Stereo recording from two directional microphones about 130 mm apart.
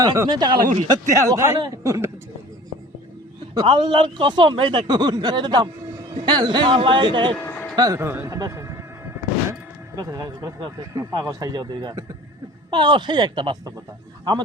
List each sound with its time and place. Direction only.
0.0 s a man's voice: 30° right (ahead or behind)
0.6 s speech: 60° right (ahead or behind)
0.9 s speech: 25° right (ahead or behind)
3.5 s a man's voice: 35° right (ahead or behind)
7.3 s a sound: 15° left (ahead or behind)
7.8 s speech: 25° right (ahead or behind)
8.4 s music: 25° right (ahead or behind)
10.6 s a man's voice: 30° right (ahead or behind)